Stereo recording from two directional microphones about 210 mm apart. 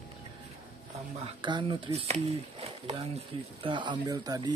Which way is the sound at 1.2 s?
25° right (ahead or behind).